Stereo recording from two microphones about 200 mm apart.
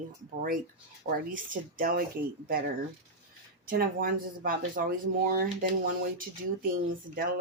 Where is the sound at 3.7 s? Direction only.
45° right (ahead or behind).